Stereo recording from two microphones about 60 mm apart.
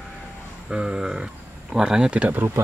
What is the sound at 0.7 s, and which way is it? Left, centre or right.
Speech, centre.